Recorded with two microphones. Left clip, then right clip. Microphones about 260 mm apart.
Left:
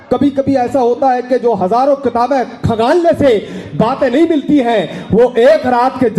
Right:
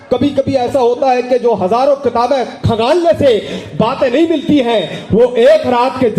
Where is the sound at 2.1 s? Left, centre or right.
Centre.